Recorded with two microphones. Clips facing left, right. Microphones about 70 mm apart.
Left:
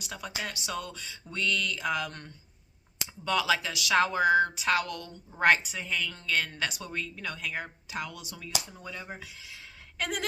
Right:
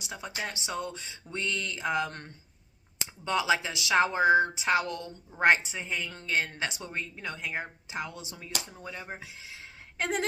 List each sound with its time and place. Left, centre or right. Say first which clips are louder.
0.0 s speech: even; right